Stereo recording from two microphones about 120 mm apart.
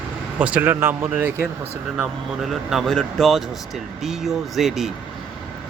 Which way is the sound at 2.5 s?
Centre (ahead or behind).